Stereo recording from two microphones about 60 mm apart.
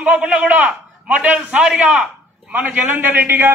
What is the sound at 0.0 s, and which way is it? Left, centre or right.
A man's voice, centre.